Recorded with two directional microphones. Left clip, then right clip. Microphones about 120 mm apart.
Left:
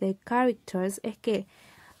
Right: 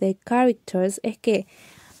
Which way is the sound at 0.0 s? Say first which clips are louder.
Right 5 dB; 35° right (ahead or behind).